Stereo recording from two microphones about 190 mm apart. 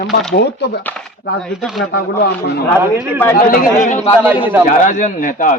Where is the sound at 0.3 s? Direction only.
60° left (ahead or behind).